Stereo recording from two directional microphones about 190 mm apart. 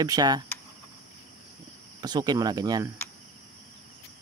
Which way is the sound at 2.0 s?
20° right (ahead or behind).